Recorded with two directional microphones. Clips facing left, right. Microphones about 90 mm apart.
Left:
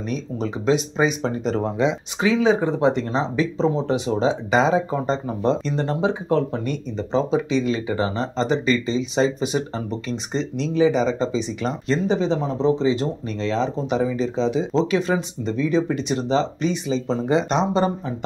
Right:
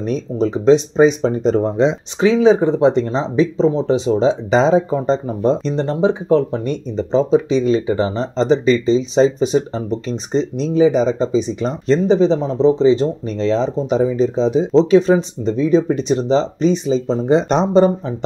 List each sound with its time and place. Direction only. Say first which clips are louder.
0.0 s speech: right 8 dB; 30° right (ahead or behind)
17.5 s speech: right 7 dB; 35° right (ahead or behind)